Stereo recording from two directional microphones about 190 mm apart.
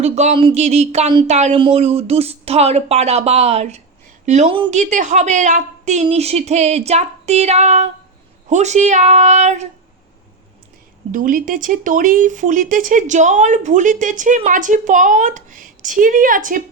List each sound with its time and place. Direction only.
0.0 s speech: 35° right (ahead or behind)
11.1 s speech: 45° right (ahead or behind)